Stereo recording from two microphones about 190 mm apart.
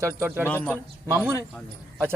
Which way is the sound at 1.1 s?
15° right (ahead or behind).